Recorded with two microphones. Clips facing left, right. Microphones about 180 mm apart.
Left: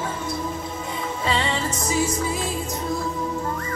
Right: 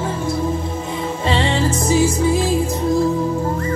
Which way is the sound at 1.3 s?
30° right (ahead or behind).